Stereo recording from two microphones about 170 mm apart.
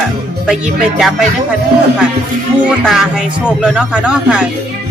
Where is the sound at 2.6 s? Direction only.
5° right (ahead or behind).